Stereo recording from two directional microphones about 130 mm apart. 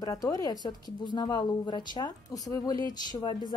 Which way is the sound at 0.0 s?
30° left (ahead or behind).